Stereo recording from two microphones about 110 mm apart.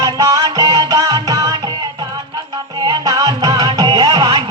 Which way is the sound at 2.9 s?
35° right (ahead or behind).